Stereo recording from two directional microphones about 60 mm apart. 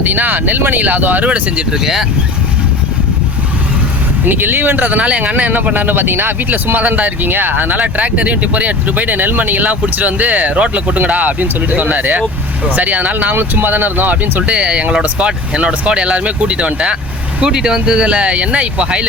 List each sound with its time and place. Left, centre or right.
0.0 s speech: right
1.8 s speech: centre
4.3 s speech: right
6.7 s speech: right